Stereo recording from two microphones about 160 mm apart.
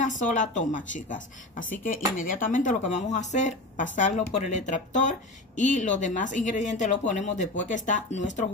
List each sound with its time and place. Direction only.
0.0 s speech: 50° left (ahead or behind)